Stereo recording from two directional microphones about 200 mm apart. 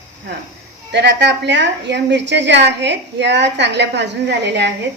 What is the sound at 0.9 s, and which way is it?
A woman's voice, 60° right (ahead or behind).